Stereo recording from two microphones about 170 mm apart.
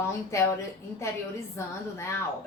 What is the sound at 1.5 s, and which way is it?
Speech, 15° left (ahead or behind).